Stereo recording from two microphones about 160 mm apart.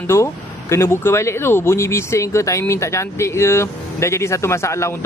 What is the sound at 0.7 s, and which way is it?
Speech, 15° left (ahead or behind).